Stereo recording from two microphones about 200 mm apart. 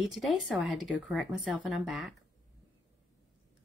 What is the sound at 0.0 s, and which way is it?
Speech, centre (ahead or behind).